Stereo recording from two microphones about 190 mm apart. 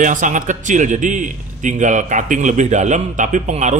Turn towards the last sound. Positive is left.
turn(degrees=-35)  # may be behind; listen again after turning